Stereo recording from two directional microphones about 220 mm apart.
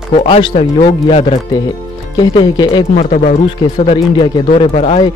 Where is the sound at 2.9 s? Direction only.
35° left (ahead or behind).